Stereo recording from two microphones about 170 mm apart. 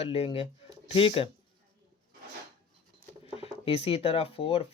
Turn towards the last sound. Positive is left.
turn(degrees=30)  # may be behind; listen again after turning